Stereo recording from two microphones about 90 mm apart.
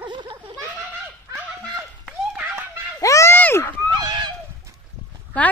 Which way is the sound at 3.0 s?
35° left (ahead or behind).